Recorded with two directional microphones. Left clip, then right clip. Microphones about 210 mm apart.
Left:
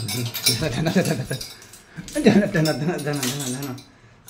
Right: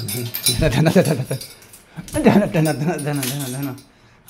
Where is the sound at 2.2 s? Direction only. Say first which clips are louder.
Right 2 dB; 15° right (ahead or behind).